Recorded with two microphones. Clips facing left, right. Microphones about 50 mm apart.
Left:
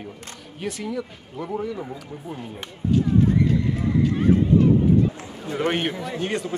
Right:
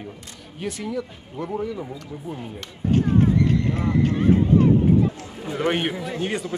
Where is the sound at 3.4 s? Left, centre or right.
Right.